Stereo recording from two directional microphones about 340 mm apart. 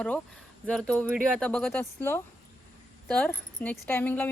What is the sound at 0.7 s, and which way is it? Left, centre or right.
Speech, centre.